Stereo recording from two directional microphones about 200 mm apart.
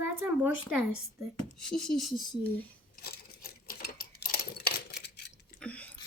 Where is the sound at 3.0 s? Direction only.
50° left (ahead or behind).